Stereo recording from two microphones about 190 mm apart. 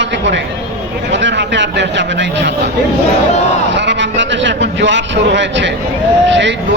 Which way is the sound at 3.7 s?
70° right (ahead or behind).